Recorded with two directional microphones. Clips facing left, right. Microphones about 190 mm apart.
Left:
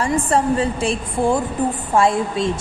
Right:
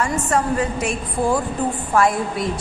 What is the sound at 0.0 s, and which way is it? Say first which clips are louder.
A woman's voice: left 2 dB; 30° left (ahead or behind).